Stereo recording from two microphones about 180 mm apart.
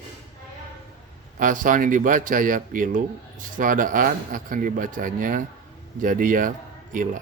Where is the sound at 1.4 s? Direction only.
45° right (ahead or behind).